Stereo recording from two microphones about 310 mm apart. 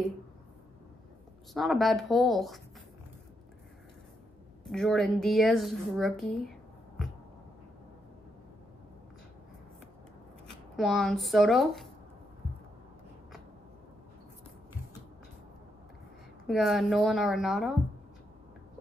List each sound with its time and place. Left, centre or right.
1.5 s speech: centre
4.6 s speech: centre
10.5 s speech: centre
16.4 s speech: centre